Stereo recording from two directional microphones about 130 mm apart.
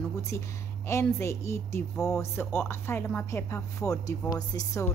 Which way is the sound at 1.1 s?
20° left (ahead or behind).